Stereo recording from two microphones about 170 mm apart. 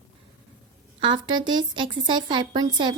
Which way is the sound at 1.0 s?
25° right (ahead or behind).